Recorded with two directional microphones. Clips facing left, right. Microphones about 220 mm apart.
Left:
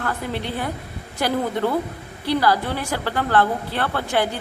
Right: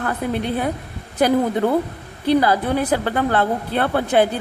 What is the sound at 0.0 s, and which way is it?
Speech, 20° right (ahead or behind).